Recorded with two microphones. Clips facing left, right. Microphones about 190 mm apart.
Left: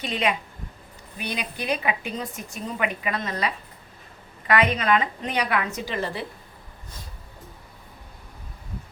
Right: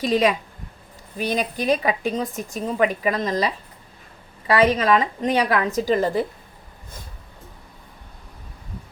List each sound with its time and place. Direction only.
0.0 s a woman's voice: 40° right (ahead or behind)